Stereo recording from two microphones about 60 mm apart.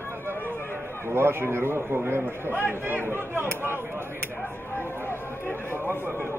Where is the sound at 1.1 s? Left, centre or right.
Right.